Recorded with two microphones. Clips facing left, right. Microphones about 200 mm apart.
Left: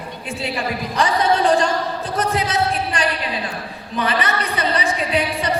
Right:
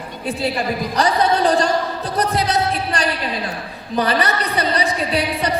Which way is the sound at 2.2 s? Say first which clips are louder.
Right 2 dB; 35° right (ahead or behind).